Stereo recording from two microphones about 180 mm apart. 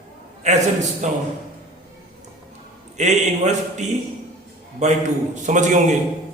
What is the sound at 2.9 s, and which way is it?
Speech, 40° right (ahead or behind).